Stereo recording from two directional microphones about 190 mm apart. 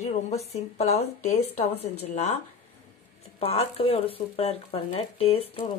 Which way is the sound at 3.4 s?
30° left (ahead or behind).